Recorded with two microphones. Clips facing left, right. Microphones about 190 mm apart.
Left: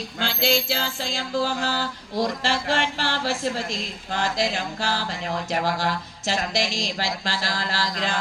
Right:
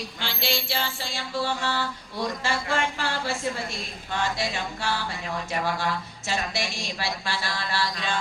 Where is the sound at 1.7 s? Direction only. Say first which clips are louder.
Left 2 dB; 35° left (ahead or behind).